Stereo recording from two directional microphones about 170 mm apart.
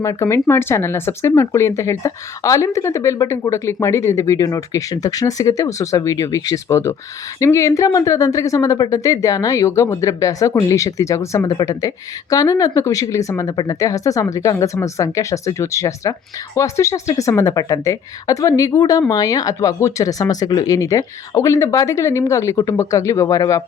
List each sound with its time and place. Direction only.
0.0 s speech: 20° left (ahead or behind)